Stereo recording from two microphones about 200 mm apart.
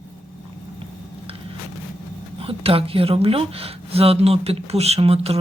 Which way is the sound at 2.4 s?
30° right (ahead or behind).